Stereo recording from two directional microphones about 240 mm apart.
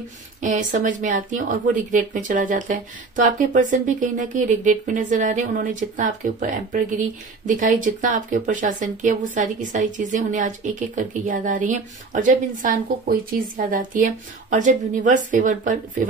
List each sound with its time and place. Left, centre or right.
0.4 s speech: right